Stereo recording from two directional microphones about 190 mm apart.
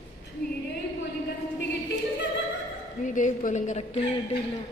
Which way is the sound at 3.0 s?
40° left (ahead or behind).